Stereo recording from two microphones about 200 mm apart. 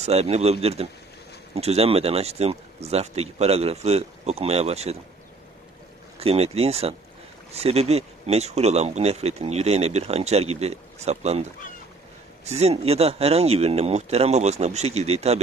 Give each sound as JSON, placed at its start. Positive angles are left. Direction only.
{"t": 0.0, "sound": "speech", "side_deg": -30}
{"t": 6.1, "sound": "speech", "side_deg": -30}
{"t": 12.4, "sound": "speech", "side_deg": -30}